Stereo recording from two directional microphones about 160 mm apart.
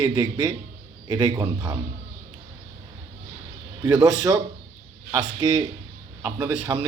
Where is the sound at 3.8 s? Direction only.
25° right (ahead or behind).